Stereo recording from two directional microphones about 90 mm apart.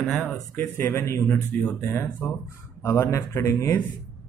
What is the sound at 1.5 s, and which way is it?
Speech, 20° left (ahead or behind).